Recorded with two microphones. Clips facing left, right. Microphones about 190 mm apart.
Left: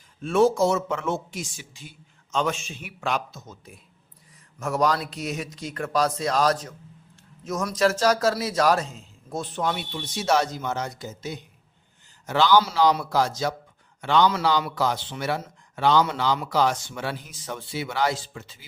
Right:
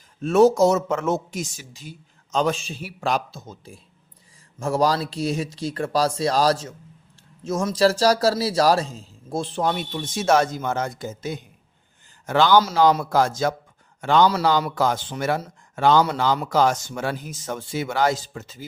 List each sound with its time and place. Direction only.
0.2 s a man's voice: 40° right (ahead or behind)